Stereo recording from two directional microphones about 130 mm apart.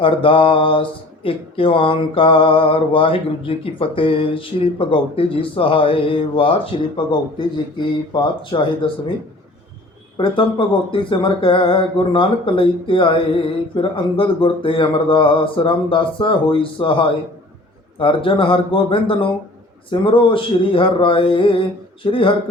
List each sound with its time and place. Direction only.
0.0 s mantra: 40° left (ahead or behind)
8.1 s speech: 40° left (ahead or behind)
10.2 s speech: 40° left (ahead or behind)
22.0 s mantra: 40° left (ahead or behind)